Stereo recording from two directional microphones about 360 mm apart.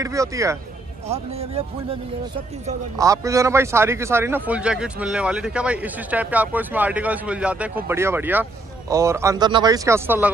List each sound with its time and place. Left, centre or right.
0.0 s speech: centre
3.0 s a man's voice: centre